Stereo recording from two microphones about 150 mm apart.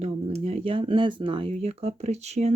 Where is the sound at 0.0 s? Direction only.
45° right (ahead or behind).